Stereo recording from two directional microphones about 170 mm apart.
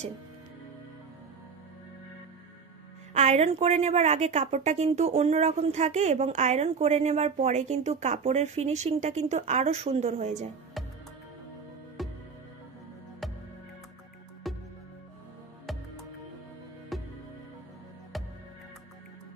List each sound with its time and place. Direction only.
3.1 s a woman's voice: 40° right (ahead or behind)
12.0 s music: centre (ahead or behind)
14.5 s music: centre (ahead or behind)
16.9 s music: centre (ahead or behind)